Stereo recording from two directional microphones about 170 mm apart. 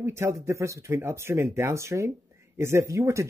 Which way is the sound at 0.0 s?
15° right (ahead or behind).